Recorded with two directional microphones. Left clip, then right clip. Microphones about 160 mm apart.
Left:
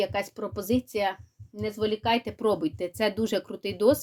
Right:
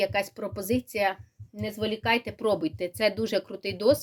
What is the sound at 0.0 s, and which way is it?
Speech, 25° left (ahead or behind).